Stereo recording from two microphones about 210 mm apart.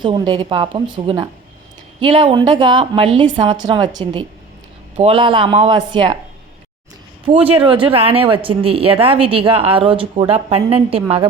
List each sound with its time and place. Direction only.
0.0 s speech: 20° right (ahead or behind)
7.3 s speech: 25° right (ahead or behind)